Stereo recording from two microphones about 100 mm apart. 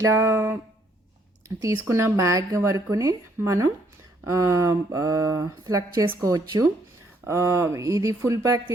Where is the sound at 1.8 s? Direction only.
25° right (ahead or behind).